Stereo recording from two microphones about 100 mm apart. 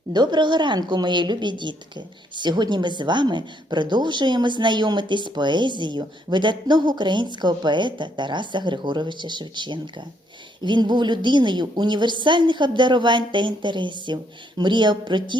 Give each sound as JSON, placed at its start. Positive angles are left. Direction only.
{"t": 0.1, "sound": "a woman's voice", "side_deg": -45}